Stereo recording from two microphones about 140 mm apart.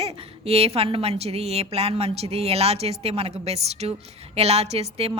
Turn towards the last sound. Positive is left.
turn(degrees=-50)  # may be behind; listen again after turning